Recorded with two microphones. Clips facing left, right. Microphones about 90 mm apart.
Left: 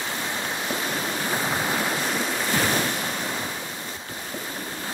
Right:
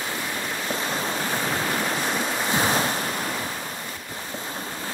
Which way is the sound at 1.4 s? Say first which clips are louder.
Left 1 dB; 10° left (ahead or behind).